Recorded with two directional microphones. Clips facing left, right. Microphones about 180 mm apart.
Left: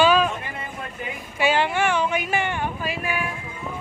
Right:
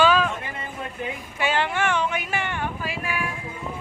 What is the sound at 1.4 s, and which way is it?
Speech, 10° left (ahead or behind).